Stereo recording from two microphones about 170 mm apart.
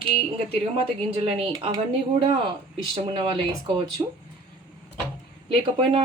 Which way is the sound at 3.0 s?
30° right (ahead or behind).